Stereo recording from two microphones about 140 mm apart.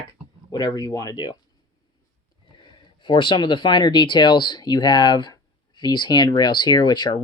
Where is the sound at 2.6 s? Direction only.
35° left (ahead or behind).